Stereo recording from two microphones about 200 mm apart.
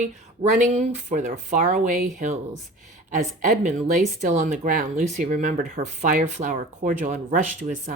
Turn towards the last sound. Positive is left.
turn(degrees=-40)  # may be behind; listen again after turning